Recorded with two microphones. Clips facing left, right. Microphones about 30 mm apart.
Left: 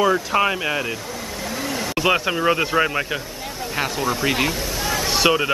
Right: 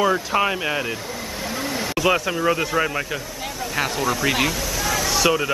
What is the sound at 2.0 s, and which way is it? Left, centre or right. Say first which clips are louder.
Speech: left 1 dB; left.